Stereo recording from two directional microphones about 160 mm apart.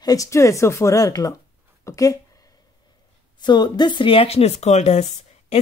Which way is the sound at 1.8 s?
20° left (ahead or behind).